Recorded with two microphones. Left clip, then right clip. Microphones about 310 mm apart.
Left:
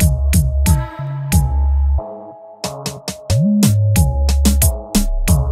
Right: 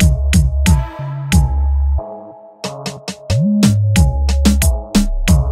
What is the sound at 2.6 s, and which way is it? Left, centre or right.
Music, left.